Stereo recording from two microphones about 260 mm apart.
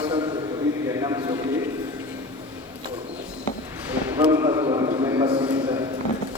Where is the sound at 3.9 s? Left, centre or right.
Centre.